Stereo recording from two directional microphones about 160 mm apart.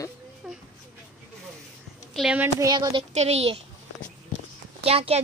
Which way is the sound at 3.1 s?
45° right (ahead or behind).